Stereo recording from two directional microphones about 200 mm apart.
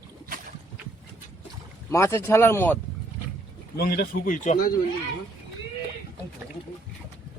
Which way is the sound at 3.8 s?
50° left (ahead or behind).